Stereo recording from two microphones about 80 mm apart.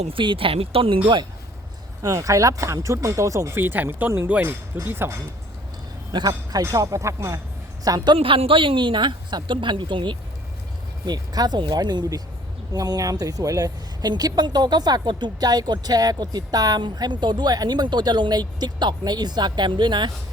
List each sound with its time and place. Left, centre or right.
0.2 s a woman's voice: right
2.0 s speech: right
3.6 s speech: right
6.1 s speech: right
7.9 s speech: right
8.1 s a woman's voice: right
11.0 s speech: right